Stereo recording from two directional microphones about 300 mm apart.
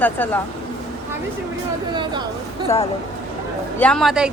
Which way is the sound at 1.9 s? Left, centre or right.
Centre.